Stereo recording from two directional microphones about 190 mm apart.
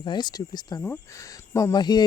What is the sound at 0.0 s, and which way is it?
Speech, 25° left (ahead or behind).